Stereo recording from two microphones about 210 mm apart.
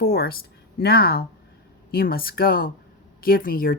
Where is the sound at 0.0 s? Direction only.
45° left (ahead or behind).